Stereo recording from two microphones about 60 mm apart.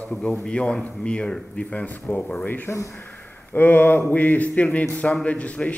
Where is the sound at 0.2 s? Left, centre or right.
Centre.